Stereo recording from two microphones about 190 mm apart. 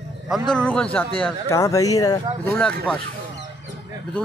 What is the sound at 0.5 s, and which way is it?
Speech, 5° left (ahead or behind).